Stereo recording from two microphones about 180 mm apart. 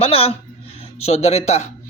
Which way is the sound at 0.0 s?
35° left (ahead or behind).